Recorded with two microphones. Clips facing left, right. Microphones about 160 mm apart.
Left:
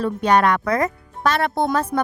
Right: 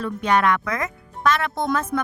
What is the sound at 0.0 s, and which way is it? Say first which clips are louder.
A woman's voice: left 3 dB; 35° left (ahead or behind).